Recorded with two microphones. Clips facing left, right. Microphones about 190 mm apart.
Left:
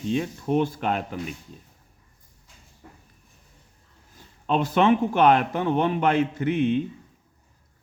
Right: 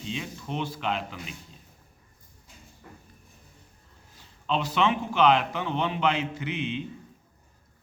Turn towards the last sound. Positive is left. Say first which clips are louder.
# left 9 dB
turn(degrees=50)  # may be behind; listen again after turning